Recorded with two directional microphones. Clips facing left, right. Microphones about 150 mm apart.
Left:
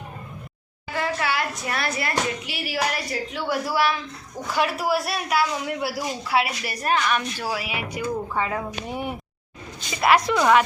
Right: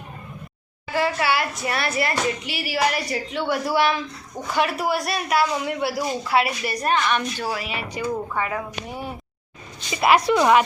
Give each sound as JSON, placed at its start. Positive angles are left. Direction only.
{"t": 0.9, "sound": "a woman's voice", "side_deg": 0}
{"t": 10.0, "sound": "a woman's voice", "side_deg": -5}